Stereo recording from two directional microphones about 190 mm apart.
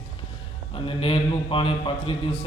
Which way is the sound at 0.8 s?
30° left (ahead or behind).